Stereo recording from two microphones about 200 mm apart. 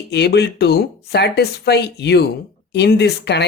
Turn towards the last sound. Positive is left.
turn(degrees=55)  # may be behind; listen again after turning